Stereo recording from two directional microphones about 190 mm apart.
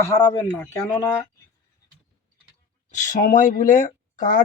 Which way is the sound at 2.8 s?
45° left (ahead or behind).